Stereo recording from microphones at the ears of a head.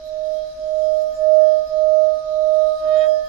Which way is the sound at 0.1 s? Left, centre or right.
Right.